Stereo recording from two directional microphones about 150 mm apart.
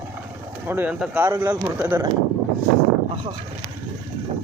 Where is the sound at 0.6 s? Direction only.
15° right (ahead or behind).